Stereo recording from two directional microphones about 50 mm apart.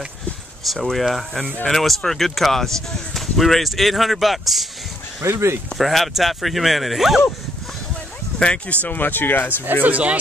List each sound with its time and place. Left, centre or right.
0.7 s speech: centre
5.2 s speech: right
5.8 s speech: centre
8.4 s speech: left
8.8 s speech: left
9.8 s speech: right